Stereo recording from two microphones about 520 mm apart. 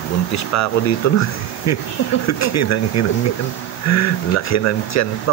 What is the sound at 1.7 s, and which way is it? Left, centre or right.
Speech, left.